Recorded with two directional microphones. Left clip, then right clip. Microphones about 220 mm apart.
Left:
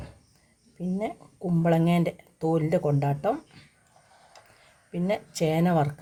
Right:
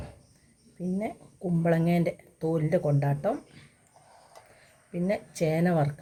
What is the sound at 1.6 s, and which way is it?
Speech, 40° left (ahead or behind).